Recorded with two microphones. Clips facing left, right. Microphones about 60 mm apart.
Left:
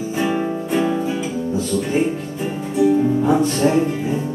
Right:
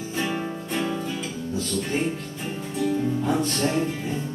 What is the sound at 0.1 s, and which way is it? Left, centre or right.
Music, centre.